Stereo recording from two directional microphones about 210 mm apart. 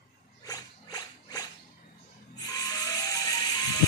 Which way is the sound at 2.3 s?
20° left (ahead or behind).